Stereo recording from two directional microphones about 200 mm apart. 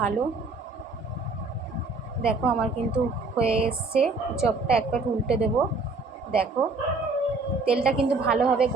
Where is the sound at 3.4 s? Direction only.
30° right (ahead or behind).